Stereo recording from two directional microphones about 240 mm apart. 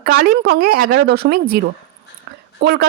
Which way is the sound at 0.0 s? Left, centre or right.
Right.